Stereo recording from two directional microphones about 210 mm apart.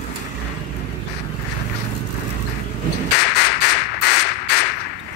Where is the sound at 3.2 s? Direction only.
50° left (ahead or behind).